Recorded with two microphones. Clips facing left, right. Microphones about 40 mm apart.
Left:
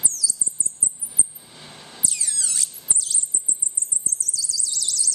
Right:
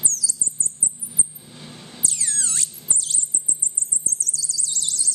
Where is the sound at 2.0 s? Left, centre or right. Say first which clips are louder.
Right 1 dB; right.